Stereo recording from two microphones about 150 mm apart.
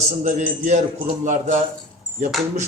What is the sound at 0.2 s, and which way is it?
A man's voice, 55° right (ahead or behind).